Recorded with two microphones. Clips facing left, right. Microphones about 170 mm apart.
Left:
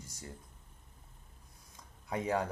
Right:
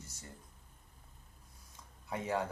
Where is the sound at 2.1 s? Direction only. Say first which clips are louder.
Left 3 dB; 15° left (ahead or behind).